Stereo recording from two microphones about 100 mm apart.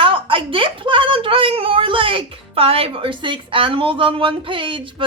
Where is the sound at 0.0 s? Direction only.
60° right (ahead or behind).